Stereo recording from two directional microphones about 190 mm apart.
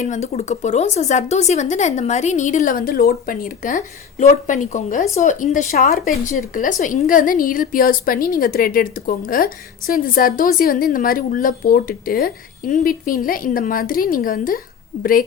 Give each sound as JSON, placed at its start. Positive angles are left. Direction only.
{"t": 0.0, "sound": "a woman's voice", "side_deg": 40}